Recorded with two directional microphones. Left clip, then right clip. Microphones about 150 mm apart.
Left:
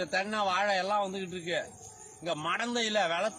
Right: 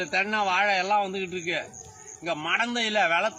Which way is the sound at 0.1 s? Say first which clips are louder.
Right 6 dB; 40° left (ahead or behind).